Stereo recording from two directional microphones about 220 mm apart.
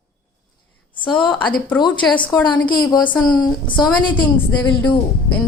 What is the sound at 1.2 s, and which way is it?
A woman's voice, 20° left (ahead or behind).